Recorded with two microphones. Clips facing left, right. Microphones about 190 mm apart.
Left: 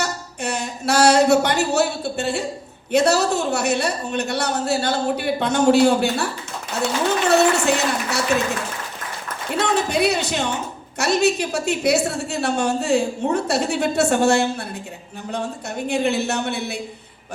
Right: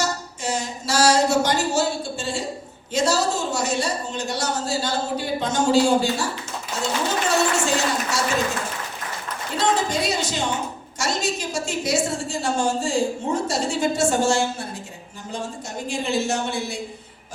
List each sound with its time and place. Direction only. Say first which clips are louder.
0.0 s a woman's voice: even; 65° left (ahead or behind)
9.6 s music: left 2 dB; 65° left (ahead or behind)
10.9 s a woman's voice: left 7 dB; 65° left (ahead or behind)
15.9 s a woman's voice: left 3 dB; 65° left (ahead or behind)